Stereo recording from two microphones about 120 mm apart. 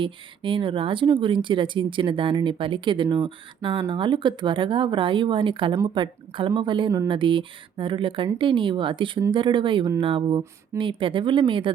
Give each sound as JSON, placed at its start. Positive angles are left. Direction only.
{"t": 0.0, "sound": "speech", "side_deg": -45}